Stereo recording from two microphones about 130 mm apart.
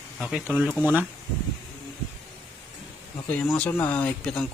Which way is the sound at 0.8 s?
15° right (ahead or behind).